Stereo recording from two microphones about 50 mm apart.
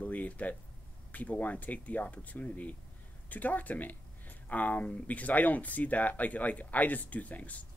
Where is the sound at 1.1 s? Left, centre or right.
Left.